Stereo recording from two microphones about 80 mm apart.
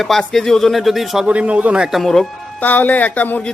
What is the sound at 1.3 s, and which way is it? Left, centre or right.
Speech, centre.